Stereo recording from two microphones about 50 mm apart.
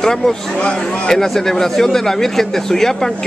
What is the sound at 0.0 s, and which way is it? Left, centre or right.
A man's voice, centre.